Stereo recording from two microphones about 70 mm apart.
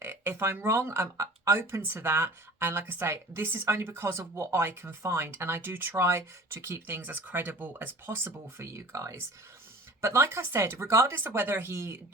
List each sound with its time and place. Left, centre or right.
0.0 s a woman's voice: right